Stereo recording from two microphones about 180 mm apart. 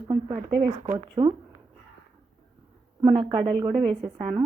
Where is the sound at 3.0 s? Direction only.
25° right (ahead or behind).